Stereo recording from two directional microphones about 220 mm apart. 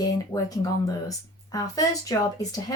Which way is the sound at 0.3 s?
5° left (ahead or behind).